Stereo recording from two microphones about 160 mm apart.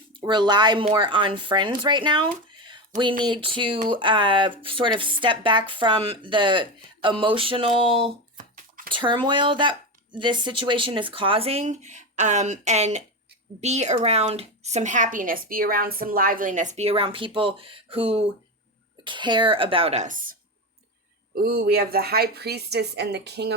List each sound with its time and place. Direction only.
0.3 s speech: 30° right (ahead or behind)
8.4 s bathtub: 60° right (ahead or behind)
8.9 s a woman's voice: 30° right (ahead or behind); by 20.3 s 55° right (ahead or behind)
21.3 s speech: 70° right (ahead or behind); by 23.6 s 90° right